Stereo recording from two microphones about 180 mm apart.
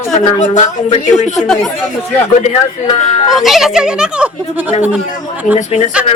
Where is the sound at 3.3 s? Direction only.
Centre (ahead or behind).